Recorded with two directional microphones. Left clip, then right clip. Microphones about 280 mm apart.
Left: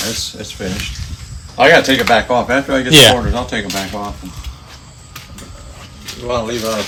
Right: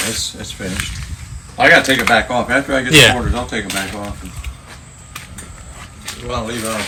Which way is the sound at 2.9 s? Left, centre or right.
Centre.